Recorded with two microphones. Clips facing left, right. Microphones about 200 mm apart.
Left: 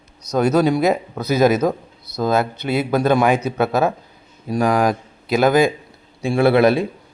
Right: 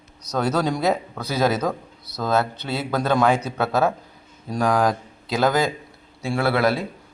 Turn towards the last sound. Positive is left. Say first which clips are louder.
# left 7 dB
turn(degrees=20)  # may be behind; listen again after turning